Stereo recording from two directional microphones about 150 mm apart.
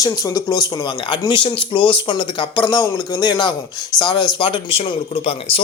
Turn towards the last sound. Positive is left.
turn(degrees=40)  # may be behind; listen again after turning